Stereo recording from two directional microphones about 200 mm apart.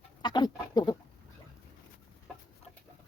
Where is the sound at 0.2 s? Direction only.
20° left (ahead or behind).